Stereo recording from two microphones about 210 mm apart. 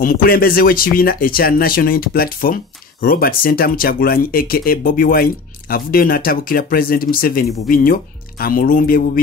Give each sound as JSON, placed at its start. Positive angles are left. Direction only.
{"t": 0.0, "sound": "speech", "side_deg": 45}